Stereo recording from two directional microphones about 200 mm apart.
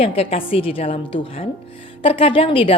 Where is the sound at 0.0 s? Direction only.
30° left (ahead or behind).